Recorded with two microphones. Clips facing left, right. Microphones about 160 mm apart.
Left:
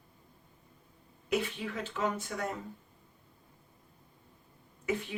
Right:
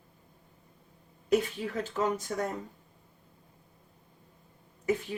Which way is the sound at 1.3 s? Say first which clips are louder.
Right 5 dB; 40° right (ahead or behind).